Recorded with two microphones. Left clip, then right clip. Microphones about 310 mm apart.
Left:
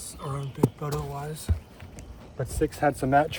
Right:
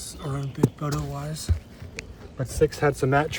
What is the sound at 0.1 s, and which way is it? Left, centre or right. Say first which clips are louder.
Speech: even; centre.